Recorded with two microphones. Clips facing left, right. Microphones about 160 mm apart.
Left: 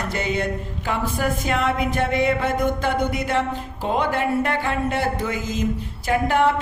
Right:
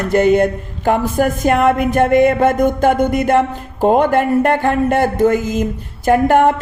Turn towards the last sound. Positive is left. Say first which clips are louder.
# right 8 dB
turn(degrees=-50)  # may be behind; listen again after turning